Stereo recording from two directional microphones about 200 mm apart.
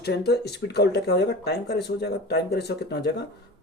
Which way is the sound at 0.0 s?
55° left (ahead or behind).